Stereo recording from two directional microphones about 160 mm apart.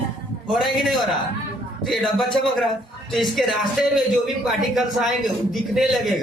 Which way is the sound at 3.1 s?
Centre (ahead or behind).